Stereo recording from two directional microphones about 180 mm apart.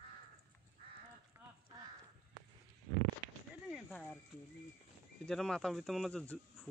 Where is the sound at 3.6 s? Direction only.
Centre (ahead or behind).